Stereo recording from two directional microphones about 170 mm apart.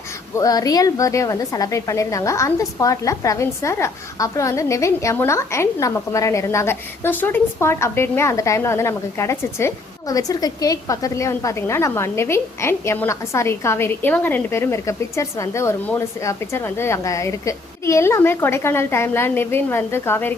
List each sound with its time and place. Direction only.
0.3 s a woman's voice: 20° left (ahead or behind)